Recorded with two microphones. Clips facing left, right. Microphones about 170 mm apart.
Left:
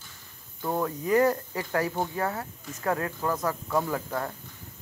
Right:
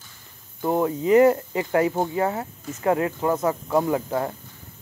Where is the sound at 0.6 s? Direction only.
20° right (ahead or behind).